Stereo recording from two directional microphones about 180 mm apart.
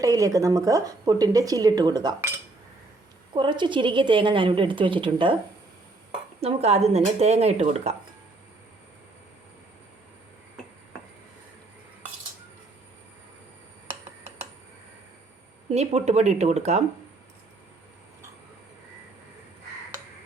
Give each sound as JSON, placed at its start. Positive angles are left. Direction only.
{"t": 0.0, "sound": "speech", "side_deg": -20}
{"t": 3.3, "sound": "speech", "side_deg": -25}
{"t": 6.4, "sound": "speech", "side_deg": -35}
{"t": 15.7, "sound": "speech", "side_deg": -35}